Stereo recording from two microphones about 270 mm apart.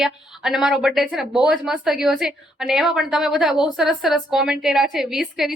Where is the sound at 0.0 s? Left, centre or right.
Centre.